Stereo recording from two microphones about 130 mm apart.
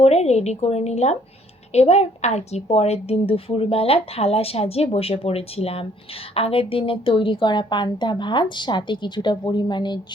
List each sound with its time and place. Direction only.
0.0 s a woman's voice: 55° left (ahead or behind); by 10.0 s 35° left (ahead or behind)